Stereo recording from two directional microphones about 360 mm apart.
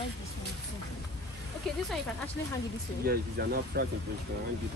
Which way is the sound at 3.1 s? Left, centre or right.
Right.